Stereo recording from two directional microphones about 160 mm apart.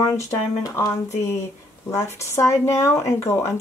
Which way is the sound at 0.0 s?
20° left (ahead or behind).